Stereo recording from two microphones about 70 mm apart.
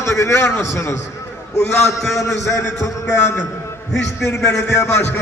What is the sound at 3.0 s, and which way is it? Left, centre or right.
Speech, left.